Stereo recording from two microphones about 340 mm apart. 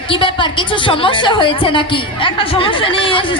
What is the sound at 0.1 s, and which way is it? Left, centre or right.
Speech, centre.